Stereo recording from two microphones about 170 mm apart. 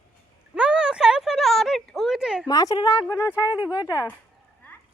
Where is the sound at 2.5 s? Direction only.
20° left (ahead or behind).